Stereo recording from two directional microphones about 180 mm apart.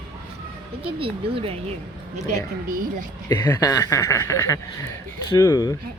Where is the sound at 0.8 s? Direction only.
30° right (ahead or behind).